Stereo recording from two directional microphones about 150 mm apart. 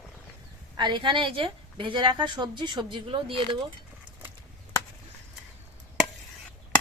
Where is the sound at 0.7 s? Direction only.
30° right (ahead or behind).